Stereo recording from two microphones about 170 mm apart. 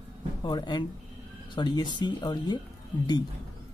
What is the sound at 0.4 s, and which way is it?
Speech, 25° left (ahead or behind).